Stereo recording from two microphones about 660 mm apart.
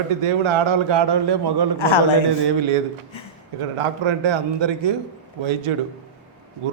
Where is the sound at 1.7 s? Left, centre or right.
Left.